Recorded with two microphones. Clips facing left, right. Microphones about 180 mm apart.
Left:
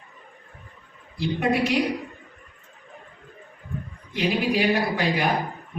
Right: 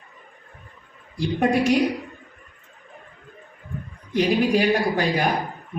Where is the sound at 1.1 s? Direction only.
45° right (ahead or behind).